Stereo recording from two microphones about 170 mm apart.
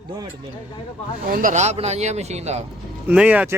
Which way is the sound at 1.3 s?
50° right (ahead or behind).